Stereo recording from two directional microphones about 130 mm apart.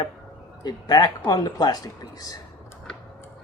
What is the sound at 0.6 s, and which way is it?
Speech, 30° left (ahead or behind).